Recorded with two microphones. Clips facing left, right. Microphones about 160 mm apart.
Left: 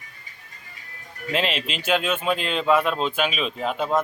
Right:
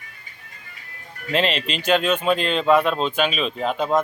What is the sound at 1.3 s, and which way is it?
Speech, 5° left (ahead or behind).